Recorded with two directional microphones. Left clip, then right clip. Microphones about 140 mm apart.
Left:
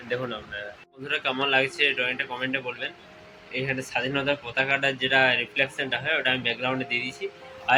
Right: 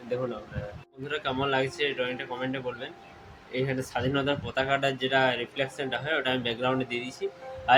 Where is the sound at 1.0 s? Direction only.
10° right (ahead or behind).